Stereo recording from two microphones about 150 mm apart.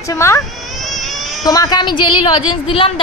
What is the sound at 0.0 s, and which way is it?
Speech, 20° left (ahead or behind).